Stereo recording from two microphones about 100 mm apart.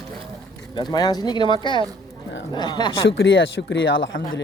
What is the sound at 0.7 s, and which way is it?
Speech, 45° left (ahead or behind).